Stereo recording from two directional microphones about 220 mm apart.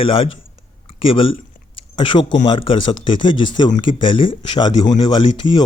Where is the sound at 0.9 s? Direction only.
25° left (ahead or behind).